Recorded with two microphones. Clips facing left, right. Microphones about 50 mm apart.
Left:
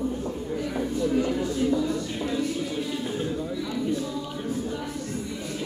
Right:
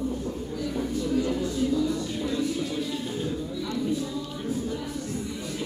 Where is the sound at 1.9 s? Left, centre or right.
Centre.